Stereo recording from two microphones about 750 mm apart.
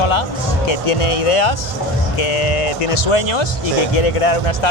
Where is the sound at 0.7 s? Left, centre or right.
Left.